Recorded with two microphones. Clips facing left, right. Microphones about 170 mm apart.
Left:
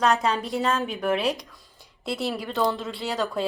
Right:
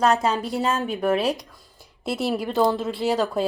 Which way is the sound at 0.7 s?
Centre (ahead or behind).